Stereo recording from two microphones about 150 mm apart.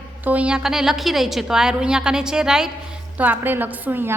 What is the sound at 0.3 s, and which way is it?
A woman's voice, 10° right (ahead or behind).